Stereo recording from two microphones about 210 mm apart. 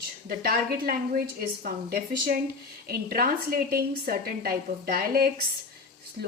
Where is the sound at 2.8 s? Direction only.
45° right (ahead or behind).